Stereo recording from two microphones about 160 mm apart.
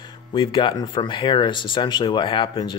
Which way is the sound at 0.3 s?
30° left (ahead or behind).